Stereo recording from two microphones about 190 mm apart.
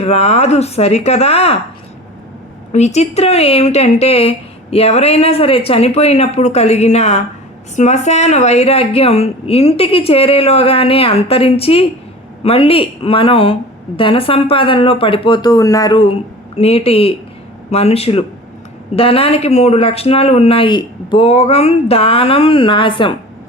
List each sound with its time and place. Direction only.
0.0 s speech: 35° left (ahead or behind)
2.7 s a woman's voice: 35° left (ahead or behind)